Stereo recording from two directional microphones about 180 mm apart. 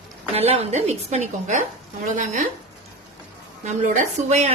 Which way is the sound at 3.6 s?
45° right (ahead or behind).